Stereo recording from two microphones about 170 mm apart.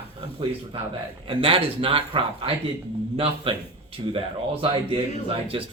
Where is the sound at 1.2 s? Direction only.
30° right (ahead or behind).